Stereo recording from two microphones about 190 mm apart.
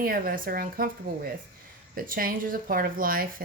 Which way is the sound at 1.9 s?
45° right (ahead or behind).